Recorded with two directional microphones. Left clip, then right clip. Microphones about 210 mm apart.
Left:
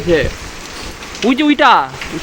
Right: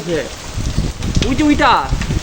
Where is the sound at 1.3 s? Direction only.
45° left (ahead or behind).